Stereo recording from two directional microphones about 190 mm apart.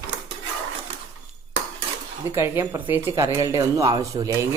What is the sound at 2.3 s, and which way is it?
Speech, 10° right (ahead or behind).